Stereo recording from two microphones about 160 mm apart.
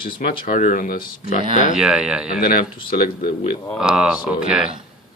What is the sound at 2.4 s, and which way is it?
Speech, 65° left (ahead or behind).